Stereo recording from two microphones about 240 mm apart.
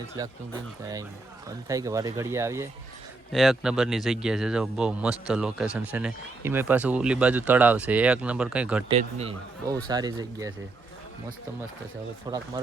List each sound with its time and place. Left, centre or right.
0.2 s speech: centre
8.9 s speech: right
12.3 s speech: centre